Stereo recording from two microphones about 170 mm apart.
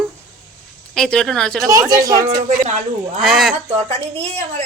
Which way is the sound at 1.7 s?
20° right (ahead or behind).